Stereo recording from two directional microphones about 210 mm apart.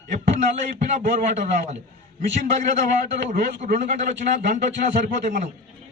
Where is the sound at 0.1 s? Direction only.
35° right (ahead or behind).